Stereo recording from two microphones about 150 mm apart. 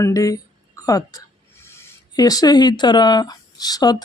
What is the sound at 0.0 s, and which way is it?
Speech, 25° left (ahead or behind).